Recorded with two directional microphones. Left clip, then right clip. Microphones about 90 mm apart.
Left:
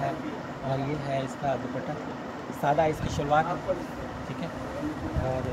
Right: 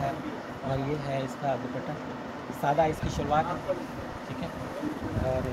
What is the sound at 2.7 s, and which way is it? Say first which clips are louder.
Speech: left 1 dB; 10° left (ahead or behind).